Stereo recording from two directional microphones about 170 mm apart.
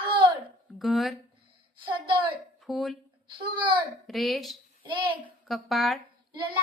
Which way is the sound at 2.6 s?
Centre (ahead or behind).